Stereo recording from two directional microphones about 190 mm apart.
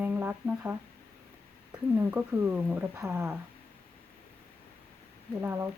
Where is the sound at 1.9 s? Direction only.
10° right (ahead or behind).